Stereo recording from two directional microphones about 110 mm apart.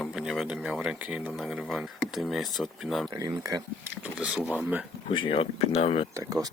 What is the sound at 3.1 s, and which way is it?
Speech, 35° right (ahead or behind).